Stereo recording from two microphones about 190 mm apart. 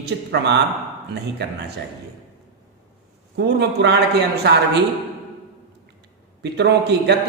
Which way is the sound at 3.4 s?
60° right (ahead or behind).